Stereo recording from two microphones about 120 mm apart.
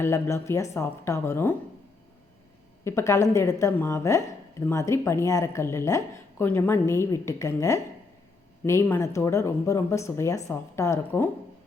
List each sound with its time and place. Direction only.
0.0 s speech: 25° left (ahead or behind)
2.8 s speech: 25° left (ahead or behind)